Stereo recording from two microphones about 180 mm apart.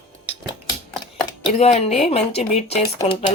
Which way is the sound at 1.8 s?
35° left (ahead or behind).